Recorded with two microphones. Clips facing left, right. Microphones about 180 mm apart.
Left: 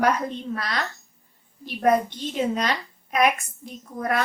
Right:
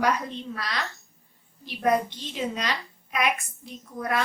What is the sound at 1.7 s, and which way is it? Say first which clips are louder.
A woman's voice: left 3 dB; 50° left (ahead or behind).